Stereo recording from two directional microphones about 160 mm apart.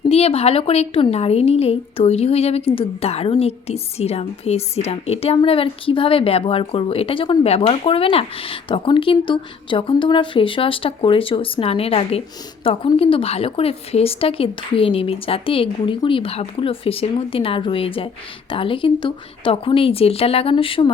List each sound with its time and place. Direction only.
0.1 s a woman's voice: 40° left (ahead or behind)